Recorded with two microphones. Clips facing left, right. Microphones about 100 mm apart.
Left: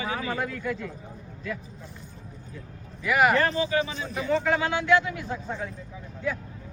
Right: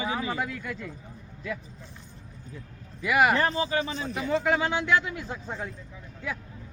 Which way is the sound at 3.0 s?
20° right (ahead or behind).